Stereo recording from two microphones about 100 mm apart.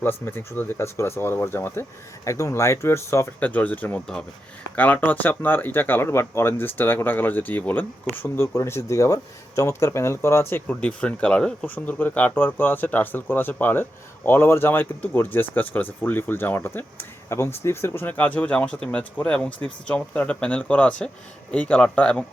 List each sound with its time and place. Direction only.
0.0 s speech: 20° left (ahead or behind)
3.4 s speech: 15° left (ahead or behind)